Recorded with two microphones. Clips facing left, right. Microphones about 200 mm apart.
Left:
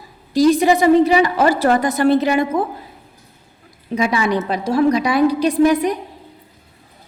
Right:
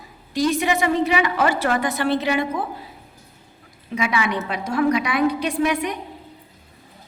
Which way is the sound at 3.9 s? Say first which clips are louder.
Left 5 dB; 35° left (ahead or behind).